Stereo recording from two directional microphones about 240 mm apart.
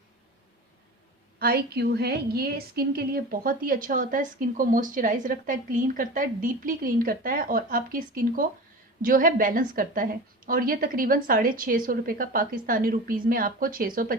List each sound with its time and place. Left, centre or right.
1.4 s a woman's voice: right